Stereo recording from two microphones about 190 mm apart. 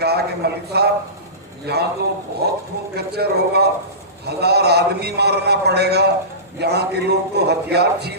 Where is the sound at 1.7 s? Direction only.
60° right (ahead or behind).